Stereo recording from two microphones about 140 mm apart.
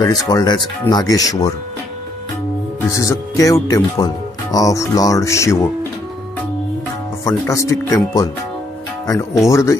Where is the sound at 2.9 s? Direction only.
25° left (ahead or behind).